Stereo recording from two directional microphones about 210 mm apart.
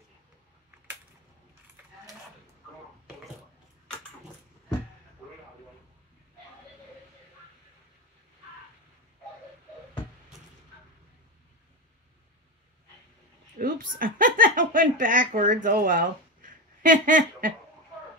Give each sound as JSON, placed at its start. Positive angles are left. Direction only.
{"t": 13.6, "sound": "speech", "side_deg": -45}